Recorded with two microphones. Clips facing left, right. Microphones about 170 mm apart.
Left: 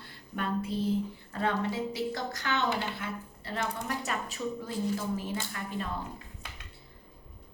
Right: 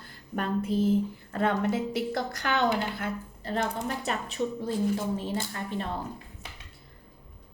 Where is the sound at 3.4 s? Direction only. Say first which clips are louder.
Right 5 dB; 35° right (ahead or behind).